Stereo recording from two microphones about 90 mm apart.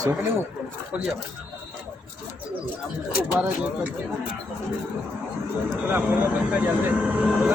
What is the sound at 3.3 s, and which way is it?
Speech, 20° right (ahead or behind).